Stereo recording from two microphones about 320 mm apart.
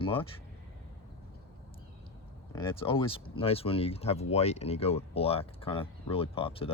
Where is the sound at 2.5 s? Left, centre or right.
Centre.